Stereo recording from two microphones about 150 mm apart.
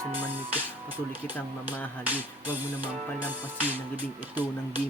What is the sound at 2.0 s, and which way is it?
Speech, 10° right (ahead or behind).